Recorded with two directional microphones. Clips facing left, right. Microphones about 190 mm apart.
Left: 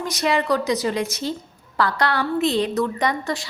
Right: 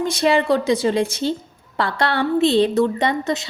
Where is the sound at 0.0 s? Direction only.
30° right (ahead or behind).